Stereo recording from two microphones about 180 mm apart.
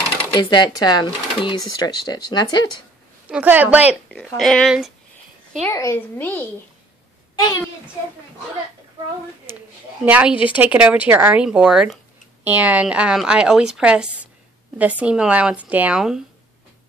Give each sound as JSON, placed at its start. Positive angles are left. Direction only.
{"t": 0.3, "sound": "speech", "side_deg": 25}
{"t": 3.3, "sound": "a woman's voice", "side_deg": -10}
{"t": 4.4, "sound": "a woman's voice", "side_deg": 5}
{"t": 5.7, "sound": "a child's voice", "side_deg": 15}
{"t": 10.0, "sound": "a woman's voice", "side_deg": -10}